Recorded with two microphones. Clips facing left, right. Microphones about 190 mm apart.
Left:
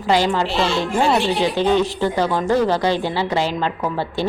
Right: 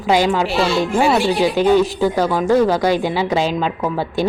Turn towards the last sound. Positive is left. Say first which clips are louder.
# right 3 dB
turn(degrees=-10)  # may be behind; listen again after turning